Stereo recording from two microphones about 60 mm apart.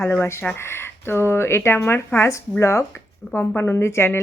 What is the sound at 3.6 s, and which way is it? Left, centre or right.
Speech, left.